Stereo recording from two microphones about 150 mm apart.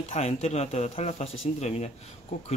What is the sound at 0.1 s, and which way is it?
Speech, 45° left (ahead or behind).